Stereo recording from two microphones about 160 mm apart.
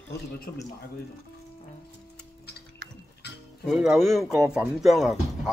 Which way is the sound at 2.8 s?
90° right.